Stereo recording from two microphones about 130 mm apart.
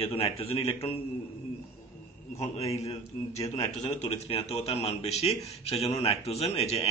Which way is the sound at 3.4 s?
30° left (ahead or behind).